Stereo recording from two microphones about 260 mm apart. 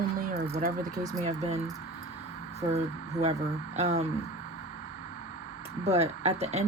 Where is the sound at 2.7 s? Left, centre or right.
Right.